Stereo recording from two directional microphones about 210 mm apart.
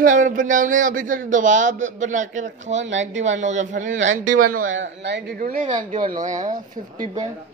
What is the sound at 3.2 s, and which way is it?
Speech, 35° right (ahead or behind).